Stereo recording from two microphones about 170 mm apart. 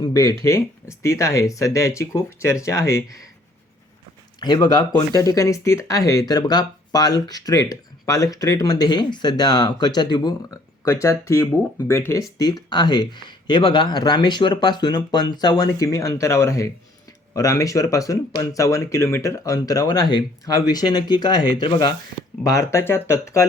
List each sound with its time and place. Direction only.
0.0 s speech: 20° left (ahead or behind)
4.4 s speech: 25° left (ahead or behind)